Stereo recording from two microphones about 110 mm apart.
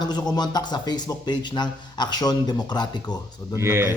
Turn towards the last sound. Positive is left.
turn(degrees=-25)  # may be behind; listen again after turning